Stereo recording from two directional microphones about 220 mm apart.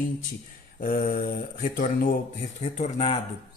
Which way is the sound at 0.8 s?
40° left (ahead or behind).